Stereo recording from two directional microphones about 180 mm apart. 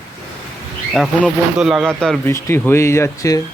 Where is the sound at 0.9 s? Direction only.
Centre (ahead or behind).